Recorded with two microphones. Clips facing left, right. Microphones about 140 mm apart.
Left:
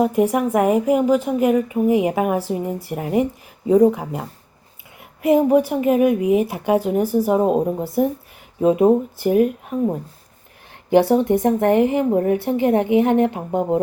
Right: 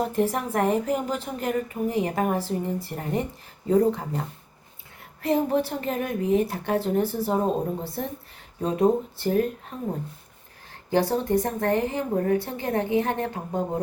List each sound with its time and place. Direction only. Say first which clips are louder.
0.1 s a woman's voice: left 7 dB; 10° left (ahead or behind)
5.2 s a woman's voice: left 8 dB; 10° left (ahead or behind)
10.8 s a woman's voice: left 8 dB; 15° left (ahead or behind)